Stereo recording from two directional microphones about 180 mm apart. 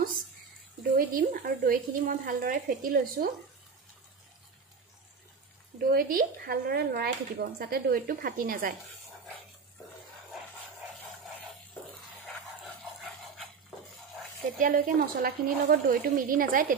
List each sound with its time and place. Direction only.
0.9 s a woman's voice: 50° right (ahead or behind)
5.8 s speech: 55° right (ahead or behind)
14.6 s a woman's voice: 55° right (ahead or behind)